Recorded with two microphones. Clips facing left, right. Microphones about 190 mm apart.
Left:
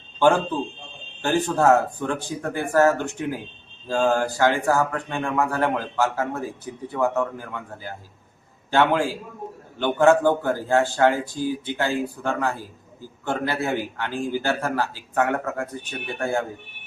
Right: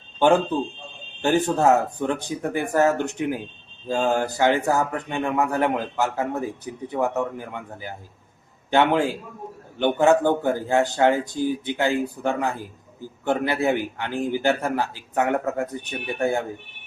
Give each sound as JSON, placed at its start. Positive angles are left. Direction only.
{"t": 1.2, "sound": "a man's voice", "side_deg": -20}